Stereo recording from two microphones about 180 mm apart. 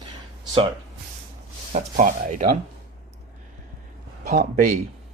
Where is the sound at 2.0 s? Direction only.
45° right (ahead or behind).